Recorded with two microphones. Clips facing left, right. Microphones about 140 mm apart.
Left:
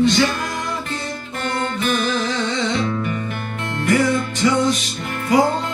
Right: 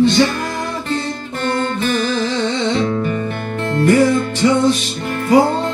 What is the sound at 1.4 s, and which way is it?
Music, 35° right (ahead or behind).